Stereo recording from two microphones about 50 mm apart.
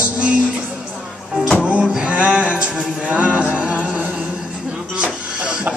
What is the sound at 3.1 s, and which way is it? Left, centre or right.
Music, right.